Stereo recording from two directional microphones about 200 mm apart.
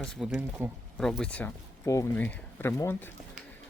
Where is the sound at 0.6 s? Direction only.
10° right (ahead or behind).